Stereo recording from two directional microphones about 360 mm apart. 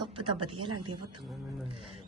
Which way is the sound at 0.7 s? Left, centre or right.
Right.